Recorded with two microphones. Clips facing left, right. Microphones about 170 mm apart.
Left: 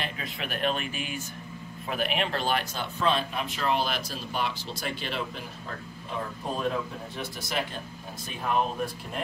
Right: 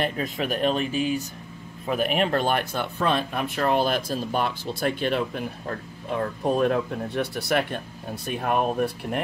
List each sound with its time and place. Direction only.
0.0 s speech: 45° right (ahead or behind)
6.1 s speech: 65° right (ahead or behind)